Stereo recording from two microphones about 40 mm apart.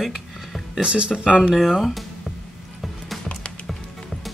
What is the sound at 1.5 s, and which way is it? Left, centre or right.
Speech, centre.